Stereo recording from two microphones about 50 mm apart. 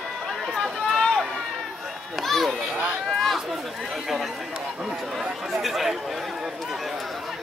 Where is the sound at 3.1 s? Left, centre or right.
Centre.